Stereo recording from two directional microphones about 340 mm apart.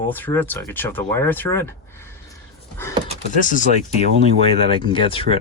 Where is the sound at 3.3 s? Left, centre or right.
Left.